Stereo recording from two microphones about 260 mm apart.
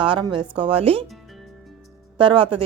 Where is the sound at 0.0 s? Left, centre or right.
Centre.